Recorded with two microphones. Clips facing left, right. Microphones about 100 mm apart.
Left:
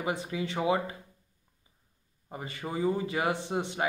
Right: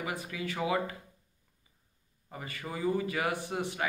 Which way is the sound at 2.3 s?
25° left (ahead or behind).